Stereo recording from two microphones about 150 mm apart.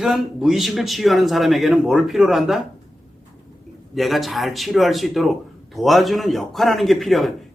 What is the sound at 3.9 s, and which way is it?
Speech, centre (ahead or behind).